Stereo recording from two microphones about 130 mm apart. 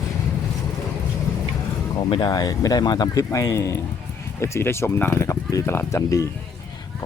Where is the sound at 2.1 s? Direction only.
35° left (ahead or behind).